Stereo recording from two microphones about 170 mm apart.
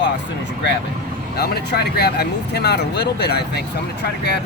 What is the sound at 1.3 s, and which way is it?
Speech, 70° left (ahead or behind).